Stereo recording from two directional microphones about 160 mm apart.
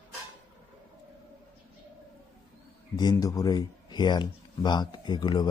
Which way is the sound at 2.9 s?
25° left (ahead or behind).